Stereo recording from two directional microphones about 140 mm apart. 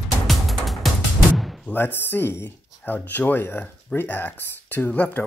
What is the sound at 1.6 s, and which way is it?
Speech, 15° left (ahead or behind).